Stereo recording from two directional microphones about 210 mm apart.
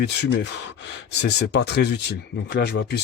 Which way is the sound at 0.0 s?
55° left (ahead or behind).